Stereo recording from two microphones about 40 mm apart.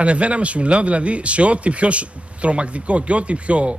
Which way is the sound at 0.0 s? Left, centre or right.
Right.